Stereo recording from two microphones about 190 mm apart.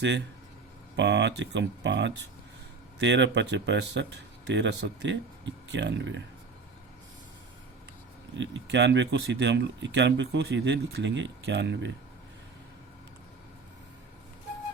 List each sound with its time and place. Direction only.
0.9 s speech: 65° right (ahead or behind)
8.4 s speech: 65° right (ahead or behind)